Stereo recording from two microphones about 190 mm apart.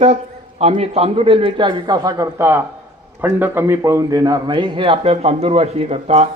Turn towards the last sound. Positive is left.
turn(degrees=-35)  # may be behind; listen again after turning